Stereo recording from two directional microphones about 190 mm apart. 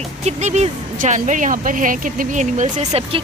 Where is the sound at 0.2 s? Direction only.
35° right (ahead or behind).